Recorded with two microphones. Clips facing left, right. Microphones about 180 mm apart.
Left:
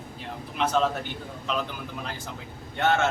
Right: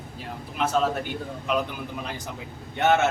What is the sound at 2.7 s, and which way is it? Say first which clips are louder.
Speech: right 3 dB; 20° right (ahead or behind).